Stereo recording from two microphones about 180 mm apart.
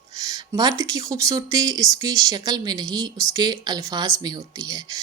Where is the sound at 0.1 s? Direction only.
20° right (ahead or behind).